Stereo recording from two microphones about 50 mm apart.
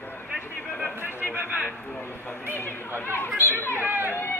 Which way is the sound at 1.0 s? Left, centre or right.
Left.